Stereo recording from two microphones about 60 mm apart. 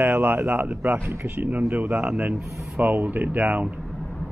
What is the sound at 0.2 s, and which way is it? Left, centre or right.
Speech, right.